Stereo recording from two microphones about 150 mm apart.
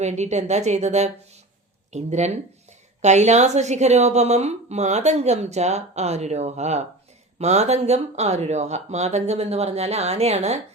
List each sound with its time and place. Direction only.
0.0 s a woman's voice: 50° right (ahead or behind)